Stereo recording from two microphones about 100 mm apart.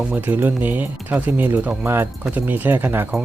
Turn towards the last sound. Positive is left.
turn(degrees=-20)  # may be behind; listen again after turning